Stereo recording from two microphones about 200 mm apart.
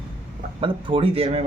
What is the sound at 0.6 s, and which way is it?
Speech, 25° right (ahead or behind).